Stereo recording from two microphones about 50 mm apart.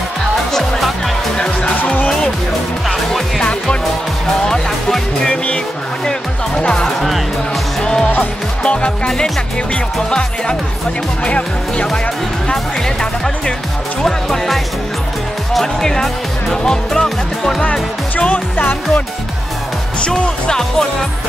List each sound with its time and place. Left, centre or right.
0.5 s music: centre
3.1 s music: centre
6.6 s speech: centre
7.8 s music: centre
8.6 s speech: centre
11.2 s speech: left
14.0 s speech: centre
16.6 s music: centre
17.6 s speech: left
20.1 s speech: centre